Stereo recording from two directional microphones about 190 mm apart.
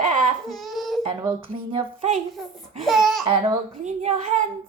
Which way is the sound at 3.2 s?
25° right (ahead or behind).